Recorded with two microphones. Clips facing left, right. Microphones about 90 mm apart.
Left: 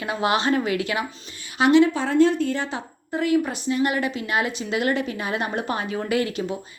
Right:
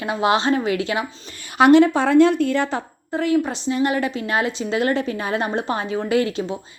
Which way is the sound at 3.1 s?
30° right (ahead or behind).